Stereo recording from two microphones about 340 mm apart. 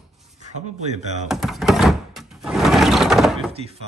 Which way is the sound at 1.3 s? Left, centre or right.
Centre.